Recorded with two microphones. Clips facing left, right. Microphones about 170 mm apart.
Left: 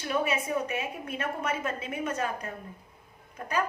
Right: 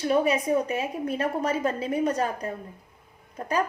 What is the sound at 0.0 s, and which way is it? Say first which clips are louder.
A woman's voice: right 6 dB; 35° right (ahead or behind).